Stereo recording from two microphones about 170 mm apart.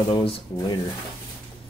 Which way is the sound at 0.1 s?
30° left (ahead or behind).